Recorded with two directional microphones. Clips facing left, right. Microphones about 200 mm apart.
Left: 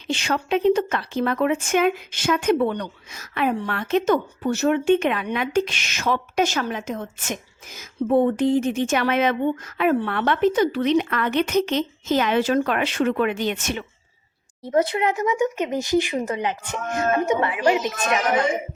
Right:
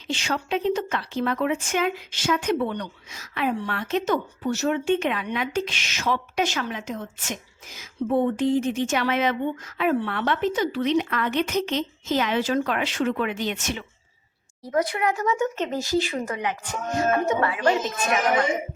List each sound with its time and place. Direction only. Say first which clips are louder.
0.1 s speech: left 4 dB; 60° left (ahead or behind)
14.6 s speech: left 3 dB; 25° left (ahead or behind)